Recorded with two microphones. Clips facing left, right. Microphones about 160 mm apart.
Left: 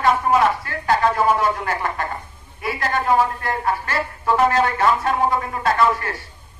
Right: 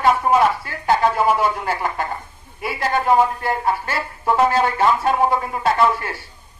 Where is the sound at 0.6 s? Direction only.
25° right (ahead or behind).